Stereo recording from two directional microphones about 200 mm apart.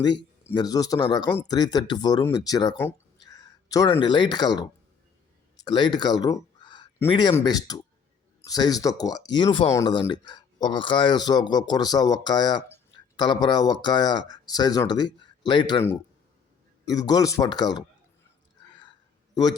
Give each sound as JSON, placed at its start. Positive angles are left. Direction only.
{"t": 0.5, "sound": "speech", "side_deg": 20}
{"t": 16.8, "sound": "speech", "side_deg": 20}